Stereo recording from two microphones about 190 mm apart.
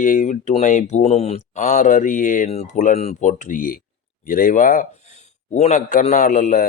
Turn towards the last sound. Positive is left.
turn(degrees=40)  # may be behind; listen again after turning